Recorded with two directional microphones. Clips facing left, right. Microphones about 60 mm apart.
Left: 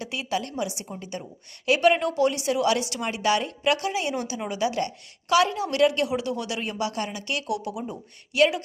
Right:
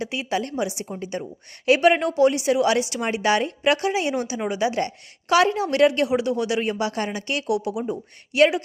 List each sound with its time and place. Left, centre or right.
0.0 s a woman's voice: right